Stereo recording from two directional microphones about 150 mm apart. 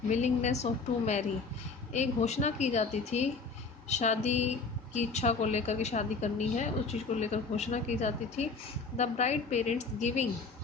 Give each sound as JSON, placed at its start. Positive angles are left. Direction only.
{"t": 0.1, "sound": "a woman's voice", "side_deg": 50}